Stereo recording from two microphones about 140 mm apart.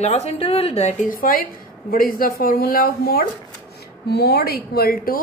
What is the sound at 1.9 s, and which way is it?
A woman's voice, 90° left.